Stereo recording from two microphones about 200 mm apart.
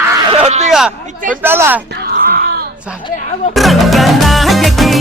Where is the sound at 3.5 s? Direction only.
Centre (ahead or behind).